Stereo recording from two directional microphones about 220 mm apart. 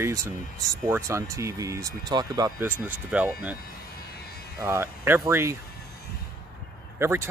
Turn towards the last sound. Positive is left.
turn(degrees=-10)  # may be behind; listen again after turning